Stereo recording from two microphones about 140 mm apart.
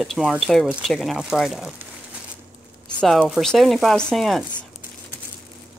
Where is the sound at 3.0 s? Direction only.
5° left (ahead or behind).